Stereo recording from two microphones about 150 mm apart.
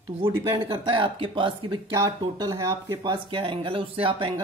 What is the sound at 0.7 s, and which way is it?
Speech, 35° right (ahead or behind).